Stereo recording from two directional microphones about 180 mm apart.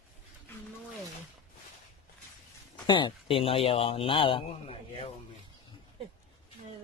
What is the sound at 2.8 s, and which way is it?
A man's voice, 25° left (ahead or behind).